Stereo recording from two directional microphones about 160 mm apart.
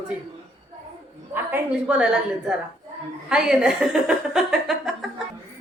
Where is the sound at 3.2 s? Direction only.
5° right (ahead or behind).